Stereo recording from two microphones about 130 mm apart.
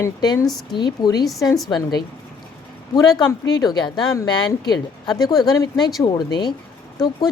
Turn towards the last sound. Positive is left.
turn(degrees=35)  # may be behind; listen again after turning